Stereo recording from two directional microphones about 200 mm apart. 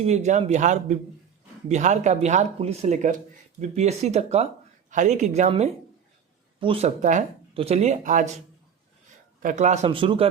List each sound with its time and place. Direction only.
0.0 s speech: 35° right (ahead or behind)
9.4 s speech: 40° right (ahead or behind)